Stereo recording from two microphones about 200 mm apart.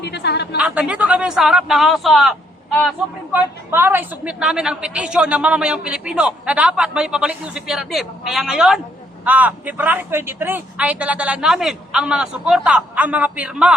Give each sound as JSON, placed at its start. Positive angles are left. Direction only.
{"t": 0.0, "sound": "a woman's voice", "side_deg": 55}
{"t": 0.5, "sound": "a woman's voice", "side_deg": -5}
{"t": 3.3, "sound": "a woman's voice", "side_deg": -10}